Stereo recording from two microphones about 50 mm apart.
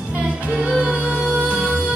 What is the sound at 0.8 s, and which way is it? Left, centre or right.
Music, centre.